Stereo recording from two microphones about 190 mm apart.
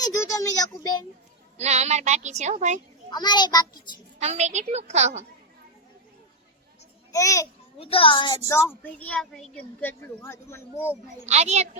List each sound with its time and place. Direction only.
0.1 s a child's voice: 15° left (ahead or behind)
1.5 s speech: 35° right (ahead or behind)
3.1 s a child's voice: 20° left (ahead or behind)
4.2 s speech: 35° right (ahead or behind)
7.1 s speech: 15° left (ahead or behind)
7.8 s a child's voice: 30° left (ahead or behind)
8.4 s speech: 10° left (ahead or behind)
11.3 s speech: 35° right (ahead or behind)